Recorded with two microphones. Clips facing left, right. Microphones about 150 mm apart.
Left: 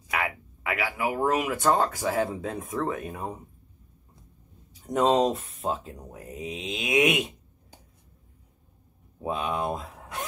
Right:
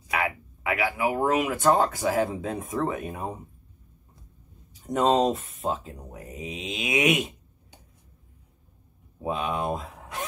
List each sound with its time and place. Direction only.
0.2 s speech: 5° right (ahead or behind)
4.8 s speech: centre (ahead or behind)
9.2 s speech: centre (ahead or behind)